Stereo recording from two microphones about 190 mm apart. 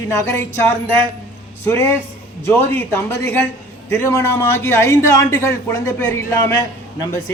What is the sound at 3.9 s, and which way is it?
A man's voice, 15° left (ahead or behind).